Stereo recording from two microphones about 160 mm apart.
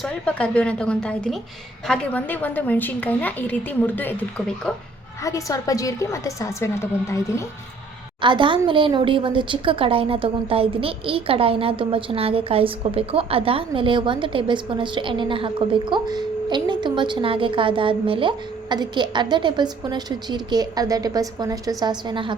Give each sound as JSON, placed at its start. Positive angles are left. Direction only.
{"t": 0.0, "sound": "a woman's voice", "side_deg": 5}
{"t": 5.2, "sound": "a woman's voice", "side_deg": 20}
{"t": 8.2, "sound": "a woman's voice", "side_deg": -30}